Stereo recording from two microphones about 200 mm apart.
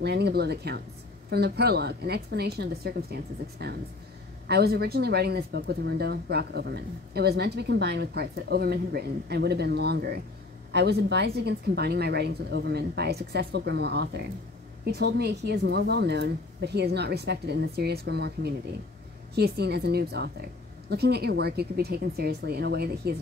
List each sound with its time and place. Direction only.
0.0 s a woman's voice: 55° right (ahead or behind)